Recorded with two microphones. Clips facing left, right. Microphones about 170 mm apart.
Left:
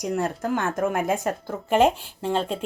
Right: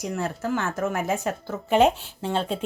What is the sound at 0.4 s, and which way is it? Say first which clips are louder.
Speech: even; 55° left (ahead or behind).